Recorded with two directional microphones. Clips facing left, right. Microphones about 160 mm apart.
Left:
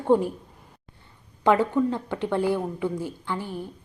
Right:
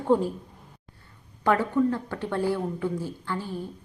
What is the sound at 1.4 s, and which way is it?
Speech, 20° left (ahead or behind).